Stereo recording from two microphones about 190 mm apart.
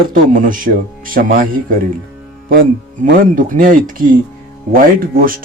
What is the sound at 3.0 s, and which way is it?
Speech, 45° right (ahead or behind).